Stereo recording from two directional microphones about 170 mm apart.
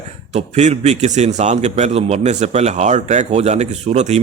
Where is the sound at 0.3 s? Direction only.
40° right (ahead or behind).